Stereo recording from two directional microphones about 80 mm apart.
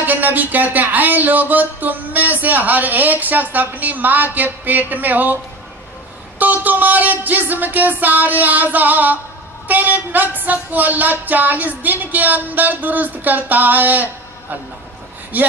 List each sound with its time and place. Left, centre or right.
0.0 s speech: right
6.4 s speech: right
15.3 s speech: right